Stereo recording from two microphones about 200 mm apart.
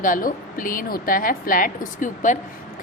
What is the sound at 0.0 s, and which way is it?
Speech, 45° left (ahead or behind).